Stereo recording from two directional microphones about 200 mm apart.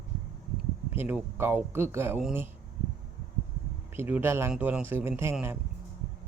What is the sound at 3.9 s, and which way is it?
Speech, 10° right (ahead or behind).